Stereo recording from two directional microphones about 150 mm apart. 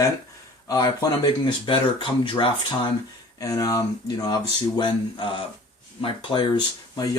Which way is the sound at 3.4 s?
25° left (ahead or behind).